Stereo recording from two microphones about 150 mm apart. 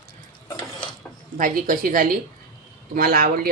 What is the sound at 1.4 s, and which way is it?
A woman's voice, 65° right (ahead or behind).